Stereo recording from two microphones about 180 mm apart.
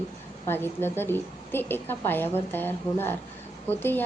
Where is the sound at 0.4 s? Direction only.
10° left (ahead or behind).